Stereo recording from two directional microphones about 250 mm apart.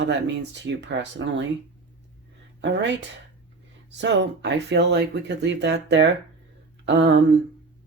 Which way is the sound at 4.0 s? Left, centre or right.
Right.